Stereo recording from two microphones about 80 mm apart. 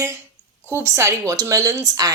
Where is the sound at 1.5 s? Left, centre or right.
Right.